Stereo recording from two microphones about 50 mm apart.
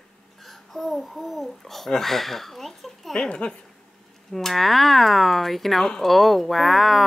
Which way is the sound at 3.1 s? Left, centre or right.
Centre.